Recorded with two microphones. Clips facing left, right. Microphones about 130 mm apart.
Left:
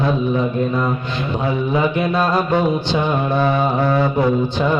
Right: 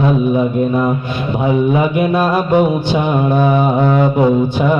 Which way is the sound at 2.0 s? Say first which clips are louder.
Right 3 dB; 15° right (ahead or behind).